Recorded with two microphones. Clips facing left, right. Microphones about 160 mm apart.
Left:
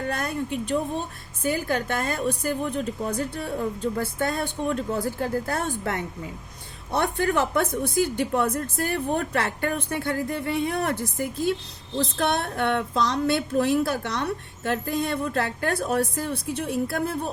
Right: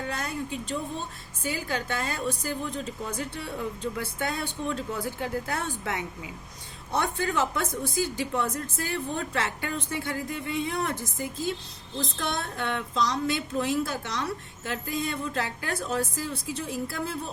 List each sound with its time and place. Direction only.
0.0 s a woman's voice: 55° left (ahead or behind)
6.9 s a woman's voice: 60° left (ahead or behind)